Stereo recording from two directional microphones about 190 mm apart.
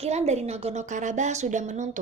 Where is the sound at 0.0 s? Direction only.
35° right (ahead or behind).